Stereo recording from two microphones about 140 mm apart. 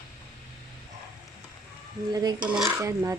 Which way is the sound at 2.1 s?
25° right (ahead or behind).